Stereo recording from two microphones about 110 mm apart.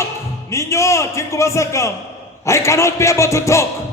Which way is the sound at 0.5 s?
25° left (ahead or behind).